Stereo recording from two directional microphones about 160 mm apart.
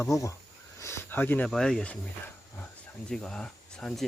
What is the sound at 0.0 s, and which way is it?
Speech, 20° left (ahead or behind).